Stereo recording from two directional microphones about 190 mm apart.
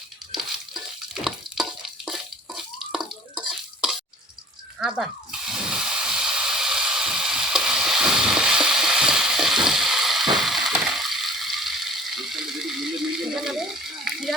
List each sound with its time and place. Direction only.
0.3 s stir: centre (ahead or behind)
1.5 s stir: 25° right (ahead or behind)
2.0 s drip: centre (ahead or behind)
3.3 s a sound: 5° right (ahead or behind)
4.8 s hiss: 5° right (ahead or behind)